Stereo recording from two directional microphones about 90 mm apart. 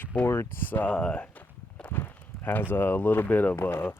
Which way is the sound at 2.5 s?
20° left (ahead or behind).